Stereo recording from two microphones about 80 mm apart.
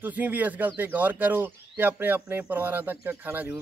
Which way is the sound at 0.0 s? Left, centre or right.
Right.